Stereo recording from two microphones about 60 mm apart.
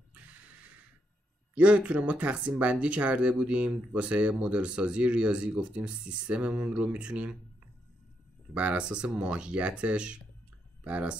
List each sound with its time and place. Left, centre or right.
0.1 s snort: right
1.5 s speech: right
8.5 s speech: right